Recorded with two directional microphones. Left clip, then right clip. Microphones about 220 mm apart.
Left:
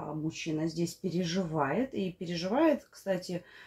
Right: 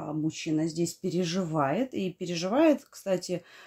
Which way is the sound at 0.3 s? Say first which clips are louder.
Right 3 dB; 45° right (ahead or behind).